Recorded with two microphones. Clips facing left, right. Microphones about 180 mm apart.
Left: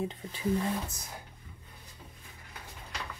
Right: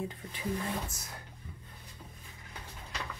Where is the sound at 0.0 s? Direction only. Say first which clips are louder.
Left 3 dB; 25° left (ahead or behind).